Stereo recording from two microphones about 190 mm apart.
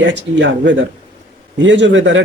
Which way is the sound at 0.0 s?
70° right (ahead or behind).